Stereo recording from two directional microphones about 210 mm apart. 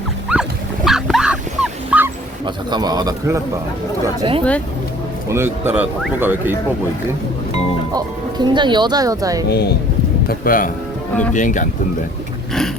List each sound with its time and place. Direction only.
0.3 s wild animals: 5° right (ahead or behind)
0.9 s dog: centre (ahead or behind)
2.6 s speech: 20° right (ahead or behind)
5.3 s speech: 10° right (ahead or behind)
7.9 s speech: 20° right (ahead or behind)
9.5 s speech: 50° left (ahead or behind)